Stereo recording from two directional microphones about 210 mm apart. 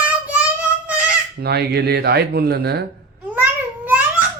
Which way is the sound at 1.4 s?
50° right (ahead or behind).